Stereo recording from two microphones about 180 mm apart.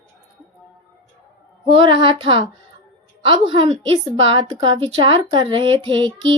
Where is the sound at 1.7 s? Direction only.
30° right (ahead or behind).